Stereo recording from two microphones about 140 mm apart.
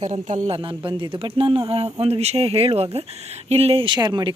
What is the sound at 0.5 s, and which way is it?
Speech, 40° right (ahead or behind).